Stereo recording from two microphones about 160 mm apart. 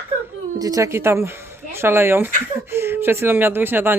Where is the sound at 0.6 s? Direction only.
20° right (ahead or behind).